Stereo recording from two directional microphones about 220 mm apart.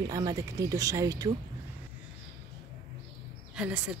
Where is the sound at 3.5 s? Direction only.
5° right (ahead or behind).